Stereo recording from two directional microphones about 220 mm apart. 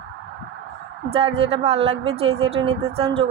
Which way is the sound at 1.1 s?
25° right (ahead or behind).